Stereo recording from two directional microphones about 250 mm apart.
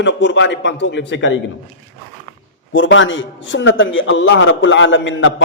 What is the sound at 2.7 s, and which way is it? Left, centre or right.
A man's voice, left.